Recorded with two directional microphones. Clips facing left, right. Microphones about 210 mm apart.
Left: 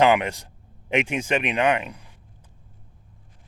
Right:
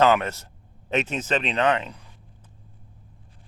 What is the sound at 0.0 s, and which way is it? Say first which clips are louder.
A man's voice: left 1 dB; 15° left (ahead or behind).